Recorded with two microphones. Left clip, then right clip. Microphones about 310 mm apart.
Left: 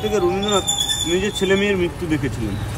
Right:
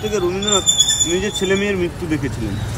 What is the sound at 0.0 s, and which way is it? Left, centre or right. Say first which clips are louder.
Speech: even; centre.